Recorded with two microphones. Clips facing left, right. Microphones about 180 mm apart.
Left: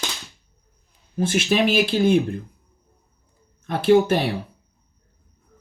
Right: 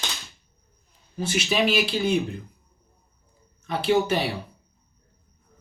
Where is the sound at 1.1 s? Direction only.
50° left (ahead or behind).